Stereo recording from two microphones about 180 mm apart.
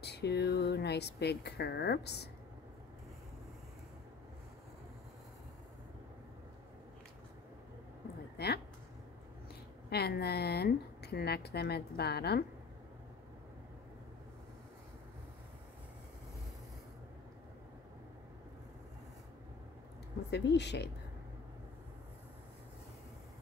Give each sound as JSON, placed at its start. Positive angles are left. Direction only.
{"t": 0.0, "sound": "speech", "side_deg": 65}
{"t": 8.4, "sound": "speech", "side_deg": 65}
{"t": 9.8, "sound": "speech", "side_deg": 65}
{"t": 20.2, "sound": "speech", "side_deg": 70}